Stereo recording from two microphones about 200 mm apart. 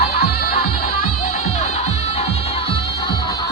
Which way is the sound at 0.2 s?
50° left (ahead or behind).